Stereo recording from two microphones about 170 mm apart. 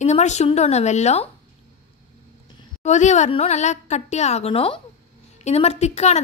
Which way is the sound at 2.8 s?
45° left (ahead or behind).